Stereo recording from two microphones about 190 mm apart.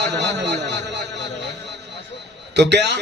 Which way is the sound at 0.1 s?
65° right (ahead or behind).